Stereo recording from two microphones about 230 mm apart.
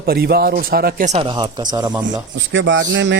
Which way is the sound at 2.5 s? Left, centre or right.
Right.